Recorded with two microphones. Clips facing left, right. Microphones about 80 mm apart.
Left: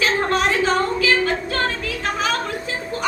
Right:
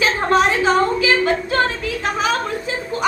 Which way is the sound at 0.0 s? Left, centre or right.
Centre.